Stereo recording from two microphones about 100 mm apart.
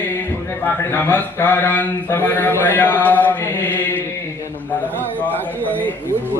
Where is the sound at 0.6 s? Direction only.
20° left (ahead or behind).